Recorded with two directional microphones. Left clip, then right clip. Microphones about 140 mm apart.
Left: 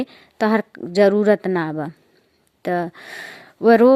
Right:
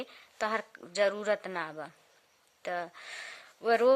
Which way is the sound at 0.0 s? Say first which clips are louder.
Left 13 dB; 40° left (ahead or behind).